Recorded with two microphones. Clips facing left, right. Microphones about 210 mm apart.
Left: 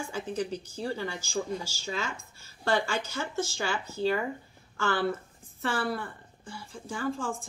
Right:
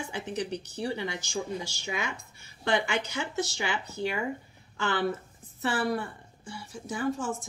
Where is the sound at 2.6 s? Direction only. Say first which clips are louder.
Even; 20° right (ahead or behind).